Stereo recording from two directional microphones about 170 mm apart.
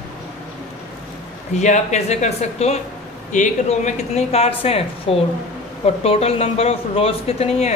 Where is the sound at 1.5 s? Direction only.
45° left (ahead or behind).